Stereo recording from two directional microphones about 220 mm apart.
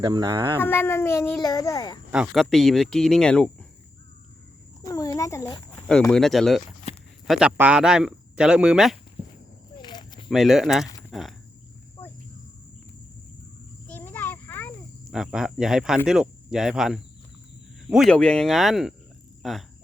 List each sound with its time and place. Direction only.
0.0 s speech: 20° right (ahead or behind)
0.5 s speech: 10° left (ahead or behind)
2.1 s speech: centre (ahead or behind)
4.9 s speech: 15° left (ahead or behind); by 9.0 s 5° right (ahead or behind)
9.2 s walk: 25° right (ahead or behind)
9.7 s a sound: 20° left (ahead or behind)
10.2 s speech: centre (ahead or behind)
11.1 s cricket: centre (ahead or behind)
13.9 s a sound: 10° left (ahead or behind)
15.1 s speech: 5° right (ahead or behind)